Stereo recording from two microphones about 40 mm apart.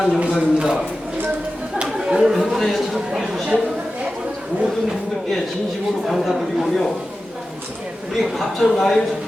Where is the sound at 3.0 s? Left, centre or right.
Centre.